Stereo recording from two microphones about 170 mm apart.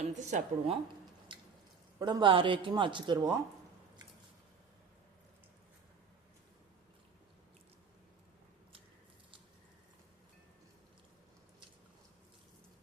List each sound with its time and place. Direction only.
0.1 s a woman's voice: 45° right (ahead or behind)
2.0 s speech: 25° right (ahead or behind)